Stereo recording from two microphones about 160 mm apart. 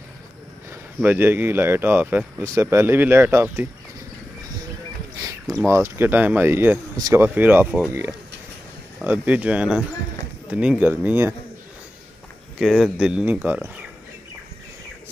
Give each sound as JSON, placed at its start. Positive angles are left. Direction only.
{"t": 0.7, "sound": "speech", "side_deg": -10}
{"t": 5.7, "sound": "speech", "side_deg": -15}
{"t": 7.2, "sound": "speech", "side_deg": -10}
{"t": 12.5, "sound": "speech", "side_deg": 0}